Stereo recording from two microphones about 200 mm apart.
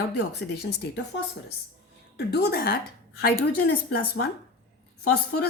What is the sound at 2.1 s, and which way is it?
A woman's voice, 55° left (ahead or behind).